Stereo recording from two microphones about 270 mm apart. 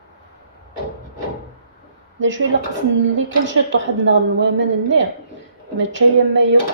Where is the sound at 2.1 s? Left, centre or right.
Right.